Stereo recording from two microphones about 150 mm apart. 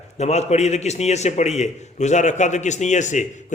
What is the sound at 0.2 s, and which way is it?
A man's voice, 45° left (ahead or behind).